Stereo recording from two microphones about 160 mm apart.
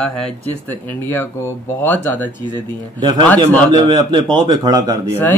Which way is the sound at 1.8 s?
10° left (ahead or behind).